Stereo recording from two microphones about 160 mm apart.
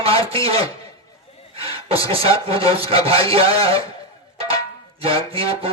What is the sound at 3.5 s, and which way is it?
Speech, 35° right (ahead or behind).